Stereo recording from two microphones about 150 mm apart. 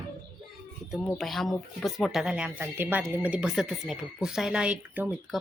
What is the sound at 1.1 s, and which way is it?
Speech, centre (ahead or behind).